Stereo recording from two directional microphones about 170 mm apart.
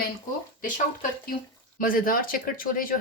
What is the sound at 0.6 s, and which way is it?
Speech, 50° left (ahead or behind).